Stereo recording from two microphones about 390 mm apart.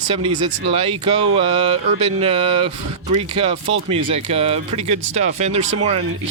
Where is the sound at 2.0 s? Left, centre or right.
Centre.